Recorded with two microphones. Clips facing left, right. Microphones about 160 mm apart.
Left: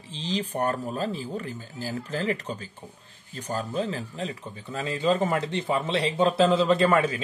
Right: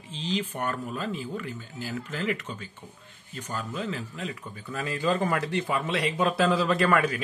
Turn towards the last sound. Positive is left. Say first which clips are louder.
# left 2 dB
turn(degrees=25)  # may be behind; listen again after turning